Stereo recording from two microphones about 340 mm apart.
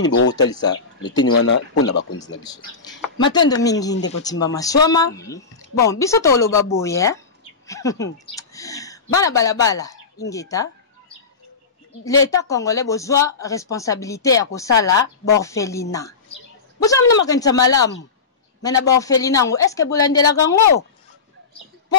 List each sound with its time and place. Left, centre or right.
0.0 s speech: left
0.5 s speech: centre
1.1 s speech: left
2.4 s speech: centre
12.0 s a woman's voice: centre